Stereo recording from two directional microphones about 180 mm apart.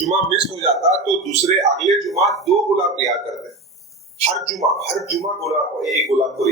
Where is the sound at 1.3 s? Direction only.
35° right (ahead or behind).